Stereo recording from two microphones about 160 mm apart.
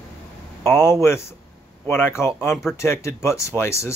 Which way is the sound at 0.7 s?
15° left (ahead or behind).